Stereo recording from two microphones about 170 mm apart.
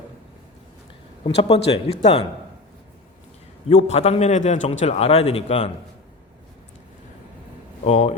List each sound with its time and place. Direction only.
1.4 s a man's voice: 35° left (ahead or behind)
3.7 s a man's voice: 40° left (ahead or behind)
7.9 s a man's voice: 40° left (ahead or behind)